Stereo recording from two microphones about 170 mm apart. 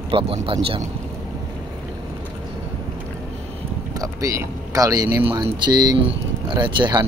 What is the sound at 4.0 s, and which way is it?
Speech, 20° right (ahead or behind).